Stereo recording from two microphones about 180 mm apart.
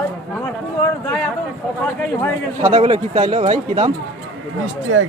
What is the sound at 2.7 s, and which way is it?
Speech, 40° right (ahead or behind).